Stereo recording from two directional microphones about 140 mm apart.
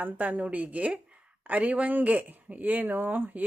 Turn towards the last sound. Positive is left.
turn(degrees=-10)  # may be behind; listen again after turning